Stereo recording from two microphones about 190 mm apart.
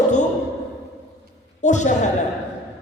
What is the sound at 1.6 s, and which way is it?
Speech, 40° left (ahead or behind).